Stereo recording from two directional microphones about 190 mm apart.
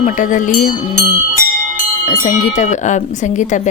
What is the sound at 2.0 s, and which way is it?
Speech, 40° left (ahead or behind).